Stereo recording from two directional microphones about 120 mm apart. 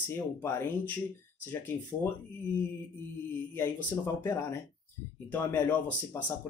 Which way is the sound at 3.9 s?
20° left (ahead or behind).